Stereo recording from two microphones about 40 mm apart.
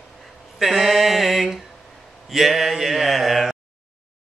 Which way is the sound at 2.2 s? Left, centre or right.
Centre.